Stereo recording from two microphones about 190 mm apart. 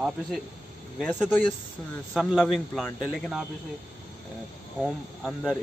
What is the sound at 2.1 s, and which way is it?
Speech, centre (ahead or behind).